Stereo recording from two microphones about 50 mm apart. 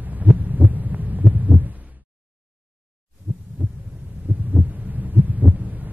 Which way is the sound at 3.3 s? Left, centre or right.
Right.